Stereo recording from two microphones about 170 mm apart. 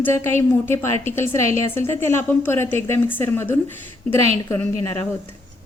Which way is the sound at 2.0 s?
15° left (ahead or behind).